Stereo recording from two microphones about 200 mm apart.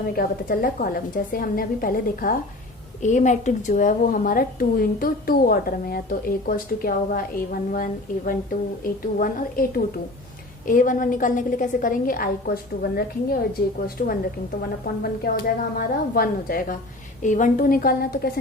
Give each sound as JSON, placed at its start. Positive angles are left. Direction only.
{"t": 0.2, "sound": "a woman's voice", "side_deg": 45}
{"t": 14.0, "sound": "a woman's voice", "side_deg": 40}